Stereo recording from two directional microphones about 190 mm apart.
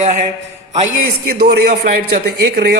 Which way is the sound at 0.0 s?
40° right (ahead or behind).